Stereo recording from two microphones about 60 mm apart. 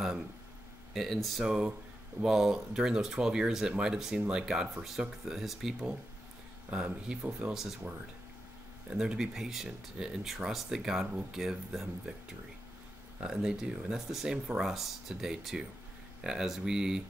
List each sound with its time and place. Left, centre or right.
0.9 s speech: centre
1.4 s speech: centre
6.7 s speech: centre
8.9 s speech: centre
13.2 s speech: centre